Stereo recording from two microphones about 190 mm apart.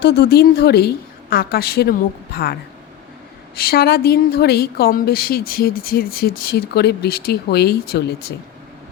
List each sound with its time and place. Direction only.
0.0 s a woman's voice: 60° left (ahead or behind)
3.6 s a woman's voice: 55° left (ahead or behind)